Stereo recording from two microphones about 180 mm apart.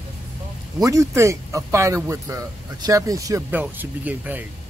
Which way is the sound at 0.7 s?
20° right (ahead or behind).